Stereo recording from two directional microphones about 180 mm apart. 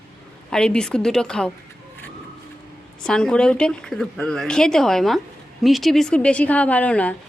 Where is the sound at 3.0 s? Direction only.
5° left (ahead or behind).